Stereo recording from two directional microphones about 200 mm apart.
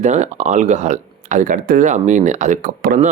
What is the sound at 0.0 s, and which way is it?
Speech, 35° right (ahead or behind).